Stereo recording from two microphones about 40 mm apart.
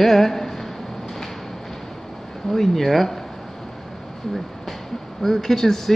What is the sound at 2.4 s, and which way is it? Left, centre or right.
Speech, centre.